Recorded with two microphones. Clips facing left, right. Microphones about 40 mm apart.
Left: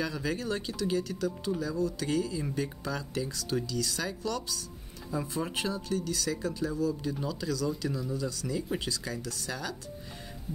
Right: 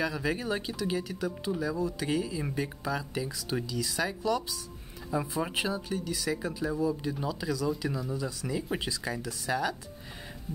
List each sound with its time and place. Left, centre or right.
0.0 s speech: centre